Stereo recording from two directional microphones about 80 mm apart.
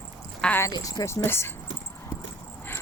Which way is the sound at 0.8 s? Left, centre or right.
Left.